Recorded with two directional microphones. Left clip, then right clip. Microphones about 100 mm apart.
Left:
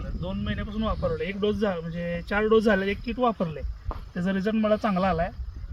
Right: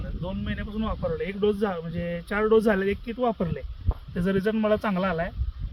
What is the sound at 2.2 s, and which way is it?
Speech, 40° right (ahead or behind).